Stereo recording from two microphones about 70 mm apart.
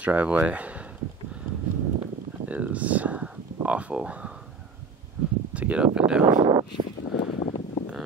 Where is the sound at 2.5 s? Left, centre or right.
Right.